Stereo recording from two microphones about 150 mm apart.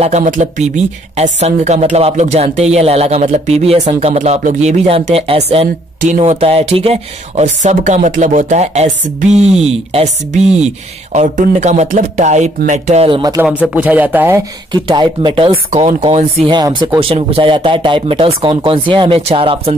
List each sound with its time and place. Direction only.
0.0 s speech: 50° right (ahead or behind)
5.9 s speech: 55° right (ahead or behind)
11.1 s speech: 55° right (ahead or behind)
13.4 s speech: 10° right (ahead or behind)
14.7 s speech: 30° right (ahead or behind)